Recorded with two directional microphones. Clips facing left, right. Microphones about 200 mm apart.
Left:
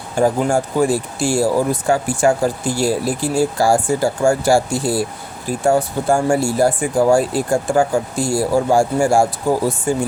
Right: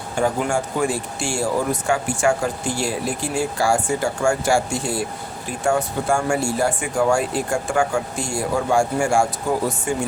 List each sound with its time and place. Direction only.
0.2 s speech: 35° left (ahead or behind)